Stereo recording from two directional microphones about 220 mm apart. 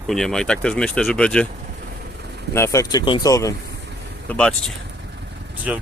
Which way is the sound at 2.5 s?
15° left (ahead or behind).